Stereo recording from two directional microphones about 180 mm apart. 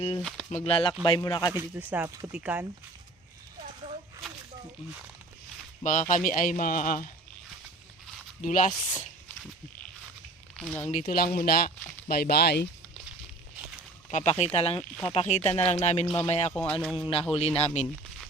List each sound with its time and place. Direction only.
0.2 s speech: 5° left (ahead or behind)
0.5 s speech: 30° left (ahead or behind)
1.5 s speech: 10° right (ahead or behind)
5.8 s a man's voice: 45° left (ahead or behind)
8.4 s a man's voice: 50° left (ahead or behind)
10.6 s speech: 10° left (ahead or behind)
10.8 s speech: 40° left (ahead or behind)
11.1 s speech: 55° left (ahead or behind)
14.1 s speech: 40° left (ahead or behind)
14.8 s speech: 5° left (ahead or behind)
15.1 s speech: 40° left (ahead or behind)
16.5 s speech: 10° left (ahead or behind)
16.8 s speech: centre (ahead or behind)
17.3 s speech: 35° left (ahead or behind)